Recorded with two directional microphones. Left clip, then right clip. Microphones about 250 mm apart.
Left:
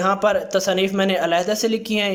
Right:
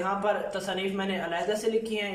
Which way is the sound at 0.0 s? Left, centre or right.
Left.